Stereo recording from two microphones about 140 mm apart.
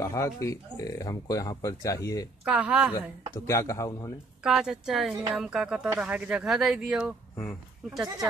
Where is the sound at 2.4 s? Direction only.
10° right (ahead or behind).